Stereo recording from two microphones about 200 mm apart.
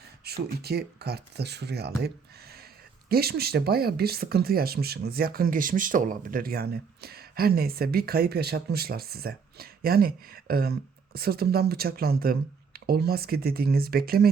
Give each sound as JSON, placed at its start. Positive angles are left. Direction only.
{"t": 0.2, "sound": "speech", "side_deg": -55}